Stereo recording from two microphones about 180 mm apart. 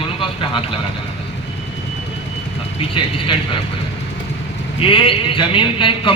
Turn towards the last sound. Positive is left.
turn(degrees=30)  # may be behind; listen again after turning